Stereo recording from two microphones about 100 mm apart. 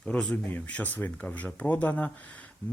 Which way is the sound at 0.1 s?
10° left (ahead or behind).